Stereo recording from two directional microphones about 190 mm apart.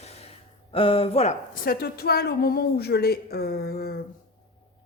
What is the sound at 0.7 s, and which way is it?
Speech, 30° left (ahead or behind).